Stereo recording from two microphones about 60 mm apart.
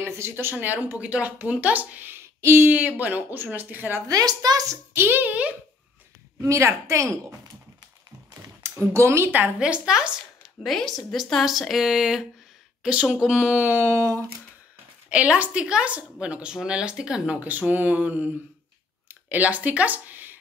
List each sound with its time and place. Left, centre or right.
0.0 s speech: right
2.1 s a sound: right
2.7 s speech: right
4.1 s a woman's voice: right
4.9 s speech: right
6.4 s a woman's voice: right
8.6 s speech: right
9.6 s speech: centre
10.6 s speech: centre
13.6 s speech: right
13.8 s a sound: right
15.0 s speech: right
17.4 s speech: right